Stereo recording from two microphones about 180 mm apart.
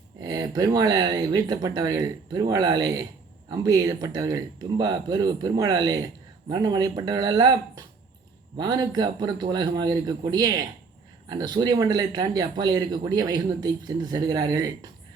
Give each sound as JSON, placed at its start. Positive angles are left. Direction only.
{"t": 0.2, "sound": "speech", "side_deg": -20}